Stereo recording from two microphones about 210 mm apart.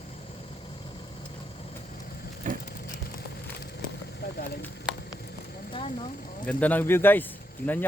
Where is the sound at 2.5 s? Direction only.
40° right (ahead or behind).